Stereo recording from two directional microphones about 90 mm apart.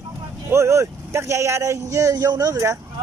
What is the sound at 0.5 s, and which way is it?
A man's voice, 30° right (ahead or behind).